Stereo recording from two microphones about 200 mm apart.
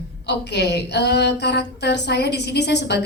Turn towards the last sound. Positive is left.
turn(degrees=55)  # may be behind; listen again after turning